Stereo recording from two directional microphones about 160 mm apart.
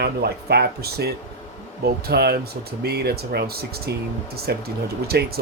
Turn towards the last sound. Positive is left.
turn(degrees=-75)  # may be behind; listen again after turning